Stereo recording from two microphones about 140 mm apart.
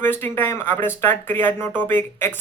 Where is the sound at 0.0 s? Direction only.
15° left (ahead or behind).